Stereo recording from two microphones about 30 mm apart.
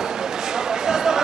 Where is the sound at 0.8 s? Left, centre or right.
Centre.